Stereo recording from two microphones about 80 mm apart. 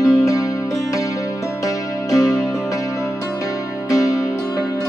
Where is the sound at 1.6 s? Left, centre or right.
Left.